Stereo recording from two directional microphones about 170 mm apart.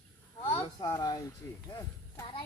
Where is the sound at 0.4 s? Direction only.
35° left (ahead or behind).